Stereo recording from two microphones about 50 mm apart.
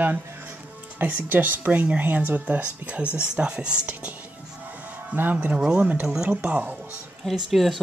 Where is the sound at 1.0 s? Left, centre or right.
Right.